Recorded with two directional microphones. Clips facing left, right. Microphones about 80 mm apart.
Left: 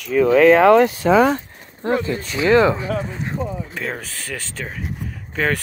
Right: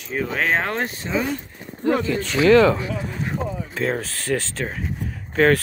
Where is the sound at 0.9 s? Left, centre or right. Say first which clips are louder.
Left 10 dB; left.